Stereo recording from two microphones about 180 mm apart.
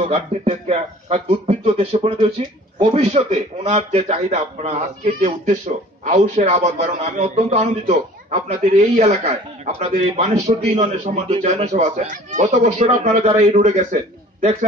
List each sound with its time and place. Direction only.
0.0 s a man's voice: 35° right (ahead or behind)